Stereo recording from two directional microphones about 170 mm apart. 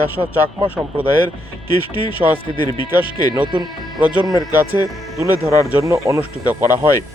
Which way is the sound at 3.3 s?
25° right (ahead or behind).